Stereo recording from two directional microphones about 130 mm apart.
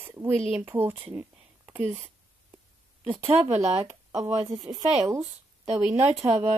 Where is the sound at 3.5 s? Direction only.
60° right (ahead or behind).